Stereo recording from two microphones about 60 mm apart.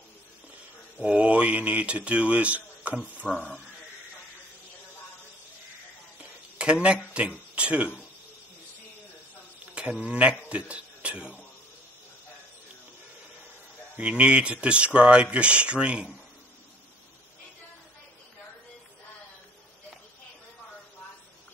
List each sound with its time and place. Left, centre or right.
0.9 s speech: right
3.3 s speech: centre
6.6 s speech: centre
9.8 s speech: right
13.9 s speech: centre